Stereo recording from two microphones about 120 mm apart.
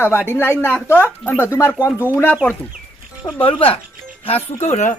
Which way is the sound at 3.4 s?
50° left (ahead or behind).